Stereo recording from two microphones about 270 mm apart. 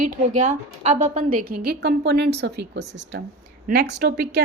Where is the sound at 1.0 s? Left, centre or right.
Right.